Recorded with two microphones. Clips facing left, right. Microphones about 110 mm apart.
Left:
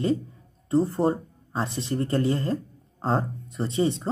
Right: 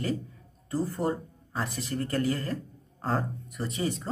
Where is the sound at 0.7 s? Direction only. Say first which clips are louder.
Left 7 dB; 25° left (ahead or behind).